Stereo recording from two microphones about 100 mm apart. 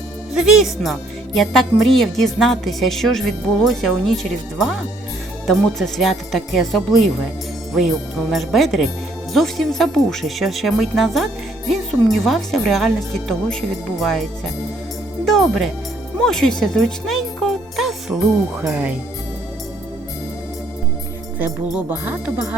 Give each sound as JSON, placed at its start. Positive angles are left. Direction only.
{"t": 0.3, "sound": "speech", "side_deg": -5}
{"t": 15.2, "sound": "music", "side_deg": 0}
{"t": 21.8, "sound": "music", "side_deg": -15}